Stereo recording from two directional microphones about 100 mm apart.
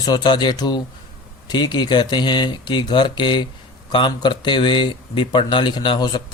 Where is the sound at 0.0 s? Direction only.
45° left (ahead or behind).